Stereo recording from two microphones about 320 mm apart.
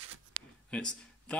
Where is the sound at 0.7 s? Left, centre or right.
Centre.